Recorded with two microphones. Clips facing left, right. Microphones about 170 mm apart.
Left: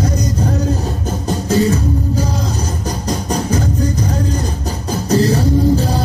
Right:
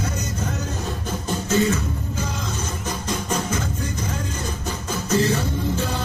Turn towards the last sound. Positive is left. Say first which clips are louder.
# left 10 dB
turn(degrees=35)  # may be behind; listen again after turning